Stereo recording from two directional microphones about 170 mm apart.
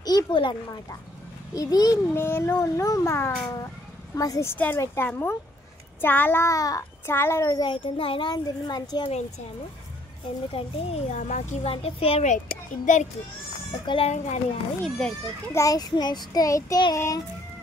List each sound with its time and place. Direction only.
0.0 s a child's voice: 25° left (ahead or behind)
10.5 s a child's voice: 40° left (ahead or behind)
13.8 s a child's voice: 35° left (ahead or behind)
15.0 s a child's voice: 5° left (ahead or behind)
15.5 s a child's voice: 20° left (ahead or behind)